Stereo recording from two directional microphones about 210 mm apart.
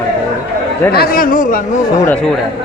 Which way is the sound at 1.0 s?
45° left (ahead or behind).